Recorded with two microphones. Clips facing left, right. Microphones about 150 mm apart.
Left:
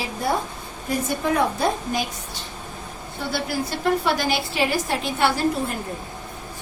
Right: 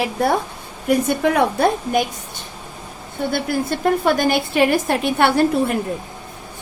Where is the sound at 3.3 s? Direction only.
50° right (ahead or behind).